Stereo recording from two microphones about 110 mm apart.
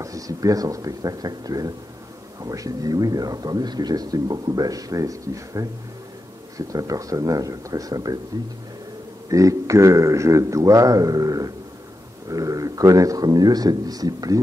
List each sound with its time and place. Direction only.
0.0 s speech: 30° right (ahead or behind)
6.7 s speech: 30° right (ahead or behind)
9.3 s speech: 30° right (ahead or behind)